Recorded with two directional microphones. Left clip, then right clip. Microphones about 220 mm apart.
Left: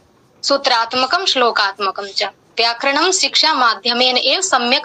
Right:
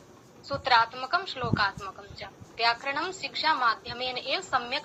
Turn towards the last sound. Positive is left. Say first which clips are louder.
# left 14 dB
turn(degrees=50)  # may be behind; listen again after turning